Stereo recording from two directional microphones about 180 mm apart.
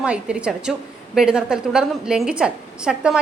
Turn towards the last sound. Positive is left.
turn(degrees=-5)  # may be behind; listen again after turning